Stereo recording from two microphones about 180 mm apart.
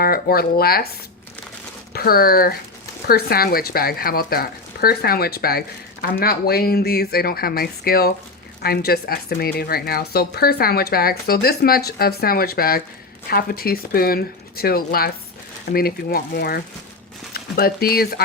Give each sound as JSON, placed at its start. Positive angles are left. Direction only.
{"t": 0.0, "sound": "speech", "side_deg": 60}
{"t": 1.9, "sound": "speech", "side_deg": 60}